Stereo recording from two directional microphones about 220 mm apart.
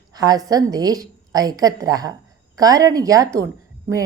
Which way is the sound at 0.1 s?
15° right (ahead or behind).